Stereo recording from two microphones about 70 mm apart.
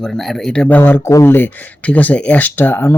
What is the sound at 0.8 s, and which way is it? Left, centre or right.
Speech, left.